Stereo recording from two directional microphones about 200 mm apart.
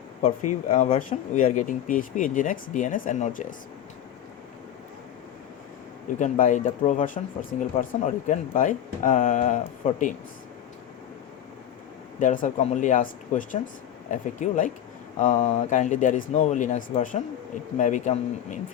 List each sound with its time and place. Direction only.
0.3 s speech: 35° left (ahead or behind)
6.1 s speech: 40° left (ahead or behind)
12.2 s speech: 40° left (ahead or behind)